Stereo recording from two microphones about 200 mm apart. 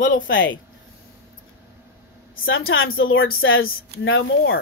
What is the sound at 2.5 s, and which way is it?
A woman's voice, 80° left.